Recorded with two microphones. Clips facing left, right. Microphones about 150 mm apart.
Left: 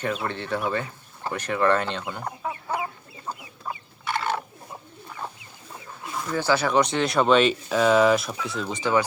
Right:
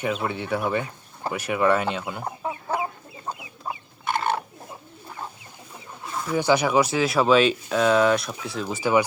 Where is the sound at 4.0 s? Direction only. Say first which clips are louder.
Right 2 dB; 50° right (ahead or behind).